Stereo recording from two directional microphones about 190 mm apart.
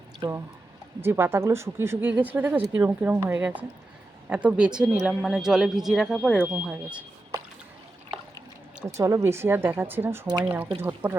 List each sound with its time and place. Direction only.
0.2 s speech: 15° right (ahead or behind)
8.8 s speech: 15° right (ahead or behind)